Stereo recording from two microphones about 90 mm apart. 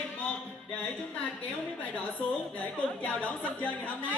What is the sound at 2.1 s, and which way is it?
A woman's voice, 15° left (ahead or behind).